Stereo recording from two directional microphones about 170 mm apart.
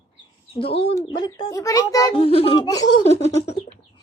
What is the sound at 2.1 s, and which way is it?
Speech, 35° left (ahead or behind).